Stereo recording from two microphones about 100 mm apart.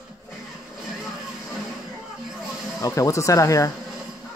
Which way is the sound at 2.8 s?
35° left (ahead or behind).